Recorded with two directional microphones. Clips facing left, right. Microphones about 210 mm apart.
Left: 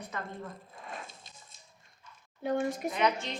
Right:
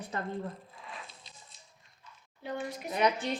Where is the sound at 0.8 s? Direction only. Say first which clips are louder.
Left 3 dB; 45° left (ahead or behind).